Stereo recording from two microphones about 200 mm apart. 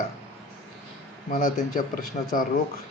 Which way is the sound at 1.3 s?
45° left (ahead or behind).